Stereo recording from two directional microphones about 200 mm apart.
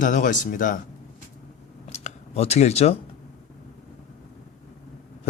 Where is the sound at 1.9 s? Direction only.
35° left (ahead or behind).